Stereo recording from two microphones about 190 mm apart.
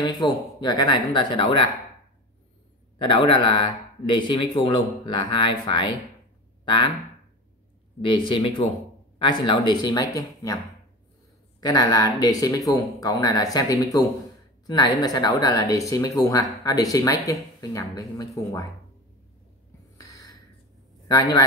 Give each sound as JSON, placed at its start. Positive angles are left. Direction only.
{"t": 0.0, "sound": "speech", "side_deg": 20}
{"t": 3.1, "sound": "speech", "side_deg": 25}
{"t": 8.3, "sound": "speech", "side_deg": 25}
{"t": 11.6, "sound": "speech", "side_deg": 20}
{"t": 20.0, "sound": "a sound", "side_deg": 20}
{"t": 21.1, "sound": "speech", "side_deg": 20}